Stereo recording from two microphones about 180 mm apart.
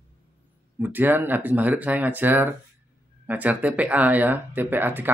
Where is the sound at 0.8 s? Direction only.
10° right (ahead or behind).